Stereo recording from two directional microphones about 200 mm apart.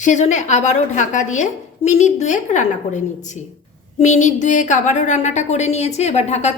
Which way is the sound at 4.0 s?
35° left (ahead or behind).